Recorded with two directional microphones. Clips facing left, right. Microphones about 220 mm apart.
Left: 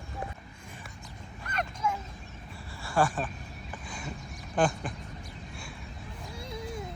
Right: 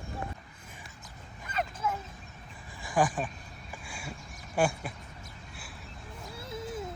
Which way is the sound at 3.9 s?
10° right (ahead or behind).